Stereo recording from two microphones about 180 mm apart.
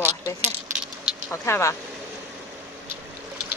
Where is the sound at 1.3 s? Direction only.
15° left (ahead or behind).